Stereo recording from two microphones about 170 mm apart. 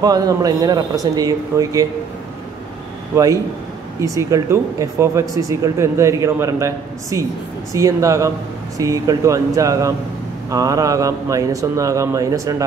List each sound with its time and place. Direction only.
0.0 s speech: 20° right (ahead or behind)
3.1 s speech: 15° right (ahead or behind)